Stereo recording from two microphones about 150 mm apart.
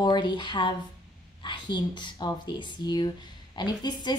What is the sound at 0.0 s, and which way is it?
A woman's voice, 30° left (ahead or behind).